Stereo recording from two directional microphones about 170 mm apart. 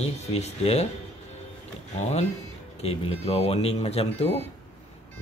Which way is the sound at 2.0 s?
40° left (ahead or behind).